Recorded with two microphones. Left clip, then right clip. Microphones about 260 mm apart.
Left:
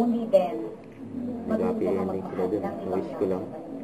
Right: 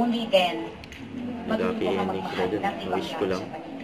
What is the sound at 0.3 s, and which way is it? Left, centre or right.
A woman's voice, centre.